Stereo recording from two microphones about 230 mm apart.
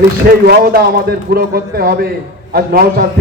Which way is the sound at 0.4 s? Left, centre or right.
Right.